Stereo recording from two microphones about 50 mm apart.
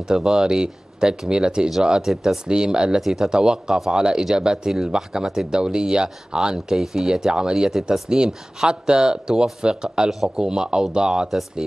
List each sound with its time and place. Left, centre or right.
0.1 s speech: centre